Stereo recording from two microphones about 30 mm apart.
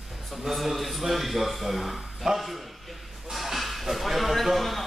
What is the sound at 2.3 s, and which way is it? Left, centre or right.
Speech, centre.